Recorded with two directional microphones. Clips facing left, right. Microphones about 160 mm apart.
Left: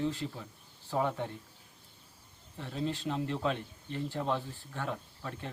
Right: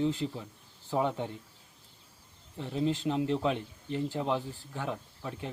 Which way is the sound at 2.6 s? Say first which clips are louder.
Right 5 dB; 20° right (ahead or behind).